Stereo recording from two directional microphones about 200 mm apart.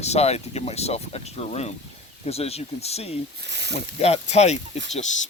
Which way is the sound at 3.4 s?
60° right (ahead or behind).